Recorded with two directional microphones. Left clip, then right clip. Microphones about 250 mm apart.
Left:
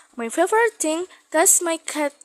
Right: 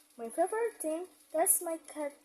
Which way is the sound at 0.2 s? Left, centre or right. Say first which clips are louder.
Left 13 dB; left.